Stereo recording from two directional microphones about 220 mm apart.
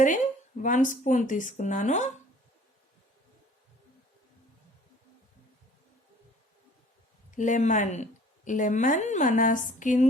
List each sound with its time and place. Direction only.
0.6 s speech: 35° left (ahead or behind)
7.3 s speech: 35° left (ahead or behind)